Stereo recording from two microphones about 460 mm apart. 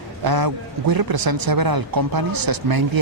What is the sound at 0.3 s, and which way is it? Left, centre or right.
A man's voice, right.